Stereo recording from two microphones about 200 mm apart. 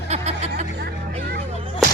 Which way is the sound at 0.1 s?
30° right (ahead or behind).